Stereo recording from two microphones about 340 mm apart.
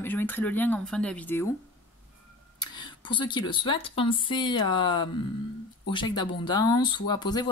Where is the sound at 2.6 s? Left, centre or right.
Centre.